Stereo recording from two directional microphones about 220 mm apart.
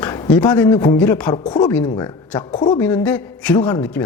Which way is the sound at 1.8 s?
20° left (ahead or behind).